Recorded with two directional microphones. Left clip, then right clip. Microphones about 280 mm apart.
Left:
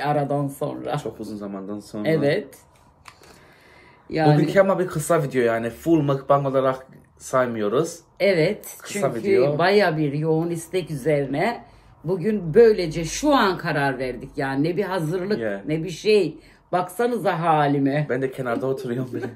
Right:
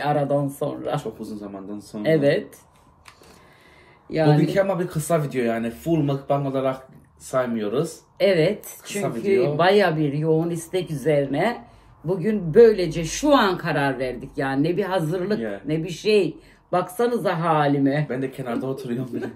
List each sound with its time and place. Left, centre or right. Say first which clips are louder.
0.0 s a man's voice: right 1 dB; centre
1.2 s speech: left 2 dB; left
2.0 s a man's voice: right 2 dB; centre
4.1 s a man's voice: left 1 dB; centre
4.4 s speech: left 3 dB; left
8.2 s a man's voice: right 1 dB; centre
8.8 s speech: left 3 dB; left
9.6 s a man's voice: right 1 dB; centre
18.0 s speech: left 3 dB; left